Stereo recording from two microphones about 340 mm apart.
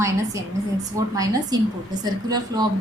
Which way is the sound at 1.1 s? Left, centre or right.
Centre.